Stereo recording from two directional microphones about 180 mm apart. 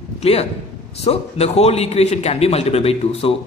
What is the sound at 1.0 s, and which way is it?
A man's voice, 35° left (ahead or behind).